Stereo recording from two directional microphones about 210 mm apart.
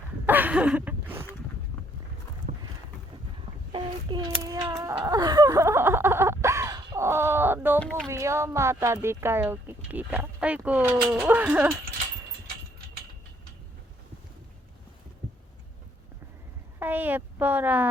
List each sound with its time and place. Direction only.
0.3 s a sound: 10° right (ahead or behind)
3.7 s speech: 20° right (ahead or behind)
4.9 s a sound: 15° right (ahead or behind)
7.8 s speech: 5° left (ahead or behind)
8.0 s speech: 15° right (ahead or behind)
16.8 s speech: 10° right (ahead or behind)